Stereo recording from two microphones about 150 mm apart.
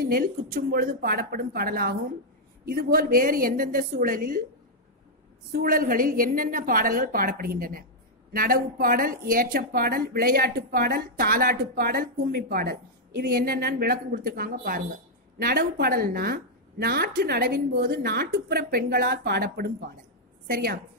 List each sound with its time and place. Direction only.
0.0 s a woman's voice: 80° right
5.5 s a woman's voice: 75° right (ahead or behind); by 19.7 s 90° right
20.4 s a woman's voice: 80° right